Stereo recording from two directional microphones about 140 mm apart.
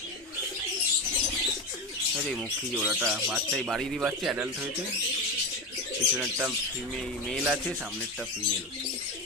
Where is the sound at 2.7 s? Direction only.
5° right (ahead or behind).